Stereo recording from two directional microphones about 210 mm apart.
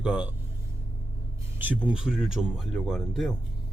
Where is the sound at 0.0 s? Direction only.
5° right (ahead or behind).